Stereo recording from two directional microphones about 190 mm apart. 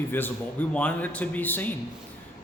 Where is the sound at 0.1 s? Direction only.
10° left (ahead or behind).